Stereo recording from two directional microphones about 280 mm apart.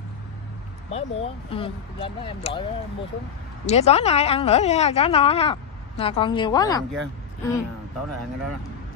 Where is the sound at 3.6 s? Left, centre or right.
Left.